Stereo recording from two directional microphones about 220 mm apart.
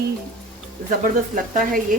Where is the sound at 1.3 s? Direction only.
35° right (ahead or behind).